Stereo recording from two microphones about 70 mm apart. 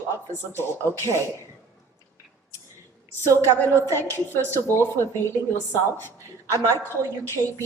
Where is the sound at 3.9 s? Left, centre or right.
Left.